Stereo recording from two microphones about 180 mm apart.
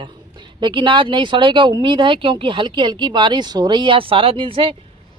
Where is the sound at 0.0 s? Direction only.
25° right (ahead or behind).